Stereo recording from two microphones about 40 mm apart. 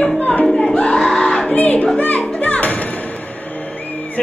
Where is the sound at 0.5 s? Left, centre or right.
Centre.